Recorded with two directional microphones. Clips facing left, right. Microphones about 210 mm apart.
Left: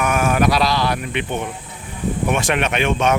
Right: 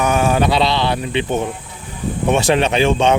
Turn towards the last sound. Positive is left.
turn(degrees=-30)  # may be behind; listen again after turning